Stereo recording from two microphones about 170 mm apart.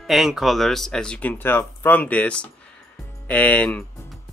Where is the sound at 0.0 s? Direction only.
Centre (ahead or behind).